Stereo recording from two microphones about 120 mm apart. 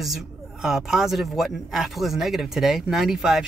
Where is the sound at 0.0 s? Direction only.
Centre (ahead or behind).